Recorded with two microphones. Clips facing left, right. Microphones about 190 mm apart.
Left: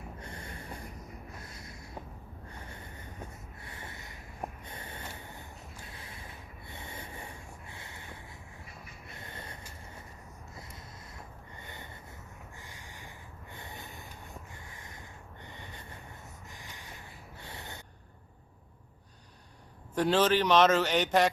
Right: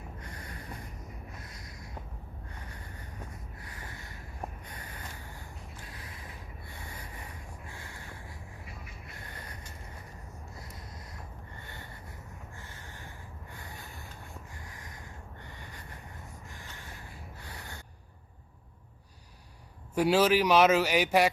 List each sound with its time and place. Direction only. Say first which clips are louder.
0.2 s snort: left 1 dB; 25° left (ahead or behind)
3.6 s snort: left 2 dB; 25° left (ahead or behind)
5.9 s creak: right 1 dB; 25° left (ahead or behind)
6.7 s boat: left 3 dB; 25° left (ahead or behind)
9.2 s a sound: left 2 dB; 25° left (ahead or behind)
11.6 s snort: even; 20° left (ahead or behind)
16.6 s a sound: right 1 dB; 15° left (ahead or behind)
17.4 s snort: left 3 dB; 25° left (ahead or behind)
20.0 s a man's voice: right 2 dB; 10° right (ahead or behind)